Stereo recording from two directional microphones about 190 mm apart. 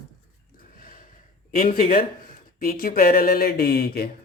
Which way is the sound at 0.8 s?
45° left (ahead or behind).